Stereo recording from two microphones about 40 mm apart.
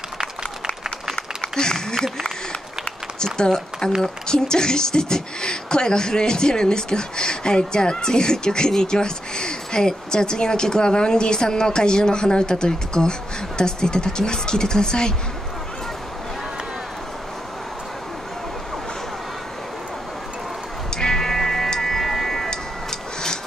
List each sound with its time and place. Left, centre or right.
1.5 s a sound: centre
3.2 s speech: centre
20.9 s music: centre